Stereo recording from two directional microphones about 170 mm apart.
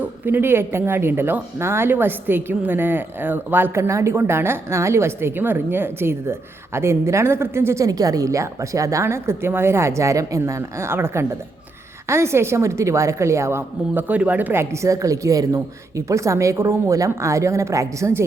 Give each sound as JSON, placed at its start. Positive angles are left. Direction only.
{"t": 0.3, "sound": "a woman's voice", "side_deg": -15}